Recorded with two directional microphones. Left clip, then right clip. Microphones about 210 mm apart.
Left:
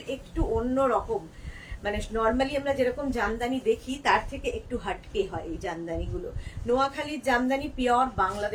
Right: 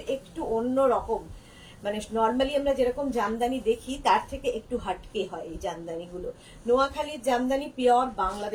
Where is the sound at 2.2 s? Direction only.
20° left (ahead or behind).